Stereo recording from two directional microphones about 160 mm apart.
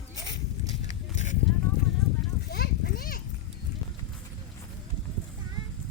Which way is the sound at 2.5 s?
75° left (ahead or behind).